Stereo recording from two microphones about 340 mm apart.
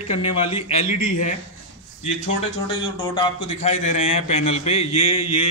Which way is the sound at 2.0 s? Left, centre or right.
Centre.